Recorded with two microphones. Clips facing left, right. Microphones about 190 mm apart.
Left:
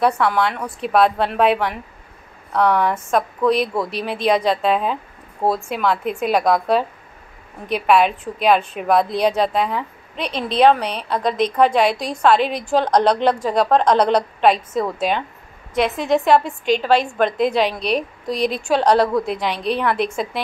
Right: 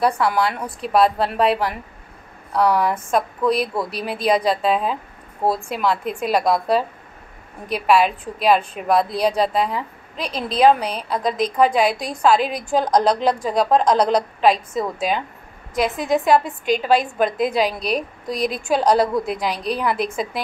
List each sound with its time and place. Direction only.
0.0 s a woman's voice: 5° right (ahead or behind)